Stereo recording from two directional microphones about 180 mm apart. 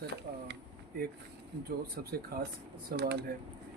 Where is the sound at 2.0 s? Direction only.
55° right (ahead or behind).